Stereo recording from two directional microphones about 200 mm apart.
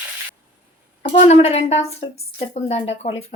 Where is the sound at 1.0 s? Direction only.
30° left (ahead or behind).